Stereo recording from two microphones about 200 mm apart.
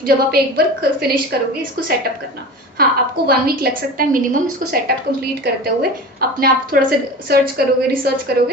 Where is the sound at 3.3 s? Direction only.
50° right (ahead or behind).